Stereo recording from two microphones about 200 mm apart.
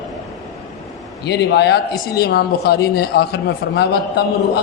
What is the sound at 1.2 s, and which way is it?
A man's voice, 55° left (ahead or behind).